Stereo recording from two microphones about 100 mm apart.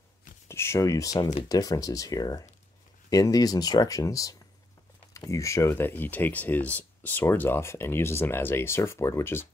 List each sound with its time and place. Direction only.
0.5 s speech: 25° left (ahead or behind)